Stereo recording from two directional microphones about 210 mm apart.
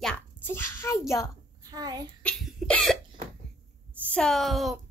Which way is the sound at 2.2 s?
Centre (ahead or behind).